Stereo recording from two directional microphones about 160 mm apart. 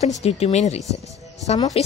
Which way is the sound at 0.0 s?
45° left (ahead or behind).